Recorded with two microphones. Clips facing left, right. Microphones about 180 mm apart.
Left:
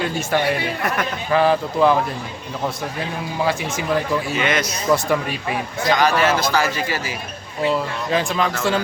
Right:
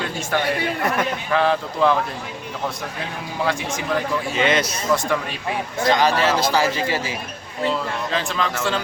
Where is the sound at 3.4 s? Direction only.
5° left (ahead or behind).